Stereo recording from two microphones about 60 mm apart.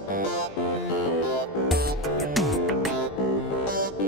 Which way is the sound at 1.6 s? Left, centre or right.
Centre.